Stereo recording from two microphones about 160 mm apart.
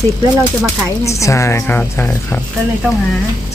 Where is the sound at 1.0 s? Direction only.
20° left (ahead or behind).